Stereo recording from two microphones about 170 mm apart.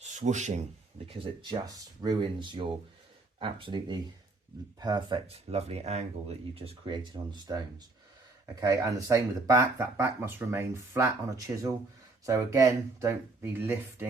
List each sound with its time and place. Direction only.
0.0 s speech: 45° right (ahead or behind)
1.0 s speech: 30° right (ahead or behind)
8.6 s speech: 20° right (ahead or behind)